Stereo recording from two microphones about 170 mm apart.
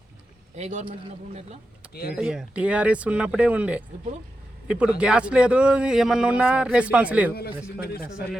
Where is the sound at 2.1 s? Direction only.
5° right (ahead or behind).